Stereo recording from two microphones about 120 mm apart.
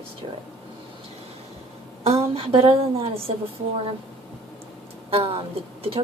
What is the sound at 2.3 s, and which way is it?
Speech, 50° right (ahead or behind).